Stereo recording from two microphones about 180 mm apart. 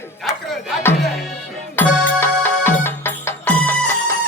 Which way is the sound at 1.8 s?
10° left (ahead or behind).